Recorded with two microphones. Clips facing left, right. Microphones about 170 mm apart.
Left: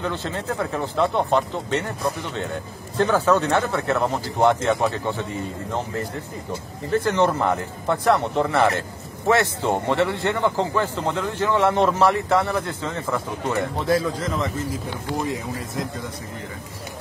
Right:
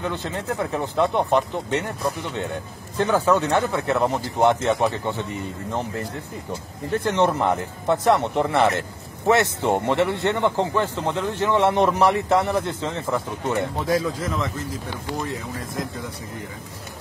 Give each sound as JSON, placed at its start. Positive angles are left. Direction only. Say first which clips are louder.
{"t": 0.1, "sound": "speech", "louder": "even", "side_deg": -15}
{"t": 3.0, "sound": "a man's voice", "louder": "left 1 dB", "side_deg": -15}
{"t": 7.1, "sound": "a man's voice", "louder": "right 1 dB", "side_deg": -20}
{"t": 14.0, "sound": "a man's voice", "louder": "left 1 dB", "side_deg": 0}